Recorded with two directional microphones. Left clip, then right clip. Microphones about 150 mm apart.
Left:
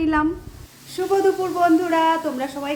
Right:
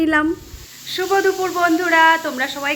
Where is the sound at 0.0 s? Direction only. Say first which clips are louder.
Right 3 dB; 25° right (ahead or behind).